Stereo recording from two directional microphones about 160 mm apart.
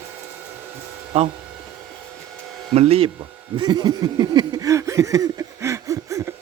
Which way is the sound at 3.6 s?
25° right (ahead or behind).